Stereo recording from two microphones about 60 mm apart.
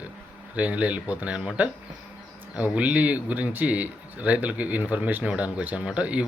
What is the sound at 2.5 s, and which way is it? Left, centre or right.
Speech, right.